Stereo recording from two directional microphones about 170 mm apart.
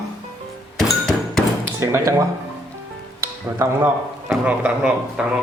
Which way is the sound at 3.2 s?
15° right (ahead or behind).